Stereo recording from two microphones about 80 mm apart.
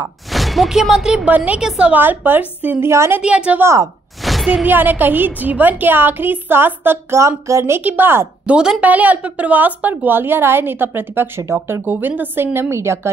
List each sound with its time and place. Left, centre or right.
0.3 s a woman's voice: centre
2.0 s a woman's voice: right
2.9 s a woman's voice: right
3.2 s a woman's voice: centre
3.6 s a woman's voice: right
4.2 s a sound: centre
4.6 s a woman's voice: right
7.8 s a woman's voice: right
8.5 s a woman's voice: centre; by 13.1 s right